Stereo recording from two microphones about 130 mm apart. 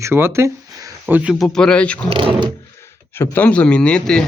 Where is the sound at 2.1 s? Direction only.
45° right (ahead or behind).